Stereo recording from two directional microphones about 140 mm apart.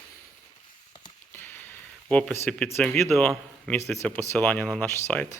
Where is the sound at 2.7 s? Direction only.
5° left (ahead or behind).